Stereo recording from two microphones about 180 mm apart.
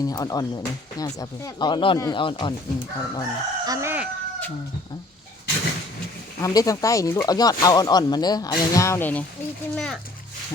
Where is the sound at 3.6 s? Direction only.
20° right (ahead or behind).